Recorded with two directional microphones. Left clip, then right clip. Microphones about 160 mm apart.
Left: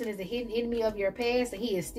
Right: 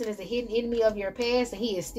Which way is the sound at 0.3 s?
40° right (ahead or behind).